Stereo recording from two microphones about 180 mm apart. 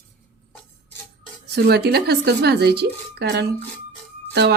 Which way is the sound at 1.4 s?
65° right (ahead or behind).